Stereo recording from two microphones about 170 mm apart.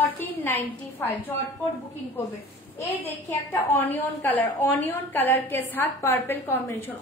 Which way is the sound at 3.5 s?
15° left (ahead or behind).